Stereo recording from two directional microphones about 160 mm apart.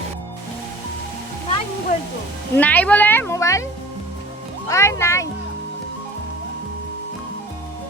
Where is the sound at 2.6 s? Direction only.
10° left (ahead or behind).